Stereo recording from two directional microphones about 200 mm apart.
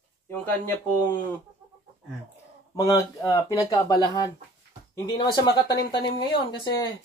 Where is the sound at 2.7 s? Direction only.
15° left (ahead or behind).